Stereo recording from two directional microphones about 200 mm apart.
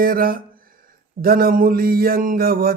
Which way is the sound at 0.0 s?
45° right (ahead or behind).